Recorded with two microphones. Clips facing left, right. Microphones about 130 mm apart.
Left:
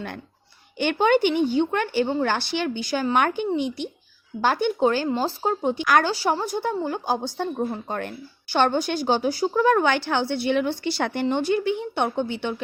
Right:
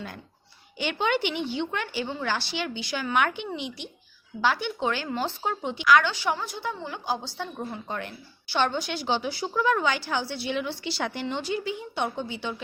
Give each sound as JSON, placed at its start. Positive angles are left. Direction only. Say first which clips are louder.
{"t": 0.8, "sound": "a woman's voice", "louder": "left 7 dB", "side_deg": 50}
{"t": 5.7, "sound": "a woman's voice", "louder": "right 4 dB", "side_deg": 45}